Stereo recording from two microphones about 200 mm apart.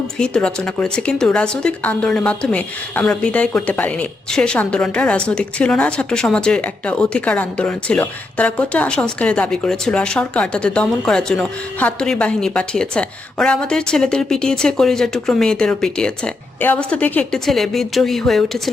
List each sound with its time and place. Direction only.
0.2 s a woman's voice: 5° left (ahead or behind)